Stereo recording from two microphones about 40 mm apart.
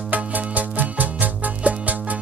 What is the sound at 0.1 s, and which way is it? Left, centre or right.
Music, right.